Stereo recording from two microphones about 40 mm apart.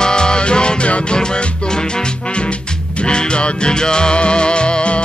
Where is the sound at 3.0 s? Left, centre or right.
Left.